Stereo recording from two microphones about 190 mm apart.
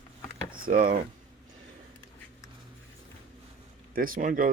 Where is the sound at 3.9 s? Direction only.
45° right (ahead or behind).